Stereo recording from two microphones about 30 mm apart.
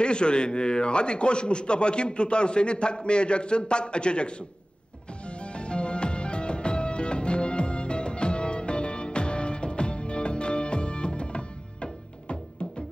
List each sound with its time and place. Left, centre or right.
0.0 s a man's voice: left
5.4 s music: left